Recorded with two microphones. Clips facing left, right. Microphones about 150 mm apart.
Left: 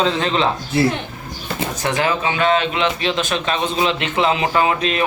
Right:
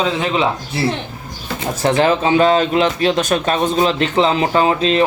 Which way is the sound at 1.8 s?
30° right (ahead or behind).